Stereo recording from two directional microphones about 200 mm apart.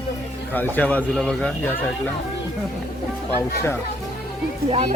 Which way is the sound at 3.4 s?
10° left (ahead or behind).